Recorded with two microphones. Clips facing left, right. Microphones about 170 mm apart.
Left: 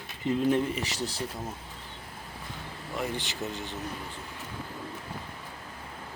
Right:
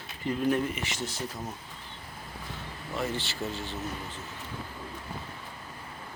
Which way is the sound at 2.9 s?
15° left (ahead or behind).